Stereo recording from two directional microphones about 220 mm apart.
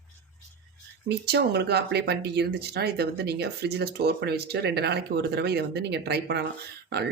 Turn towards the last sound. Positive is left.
turn(degrees=-50)  # may be behind; listen again after turning